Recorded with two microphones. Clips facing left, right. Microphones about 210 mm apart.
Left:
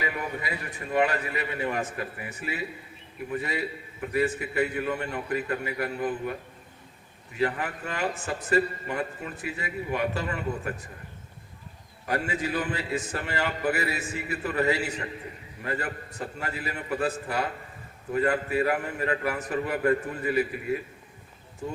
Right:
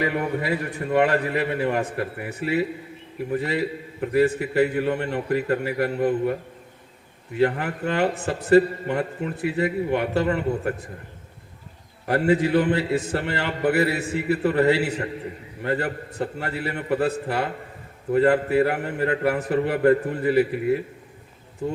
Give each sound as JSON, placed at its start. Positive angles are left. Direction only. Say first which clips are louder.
{"t": 0.0, "sound": "a man's voice", "louder": "right 8 dB", "side_deg": -60}
{"t": 7.3, "sound": "a man's voice", "louder": "right 6 dB", "side_deg": -65}
{"t": 12.0, "sound": "a man's voice", "louder": "right 9 dB", "side_deg": -60}